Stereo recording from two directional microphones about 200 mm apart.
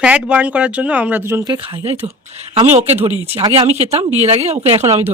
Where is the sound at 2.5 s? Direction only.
30° right (ahead or behind).